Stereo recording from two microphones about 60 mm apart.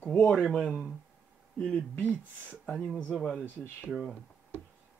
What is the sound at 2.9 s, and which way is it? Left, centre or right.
Speech, centre.